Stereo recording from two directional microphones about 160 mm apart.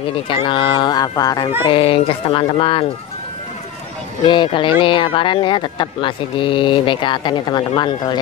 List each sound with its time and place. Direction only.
0.3 s speech: 30° left (ahead or behind)
1.7 s speech: 35° left (ahead or behind)
4.3 s speech: 30° left (ahead or behind)